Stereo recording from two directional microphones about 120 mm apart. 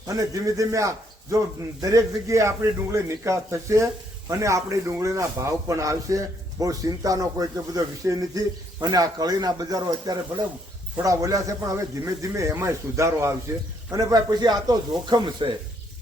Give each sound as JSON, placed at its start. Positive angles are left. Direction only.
{"t": 0.1, "sound": "a man's voice", "side_deg": -30}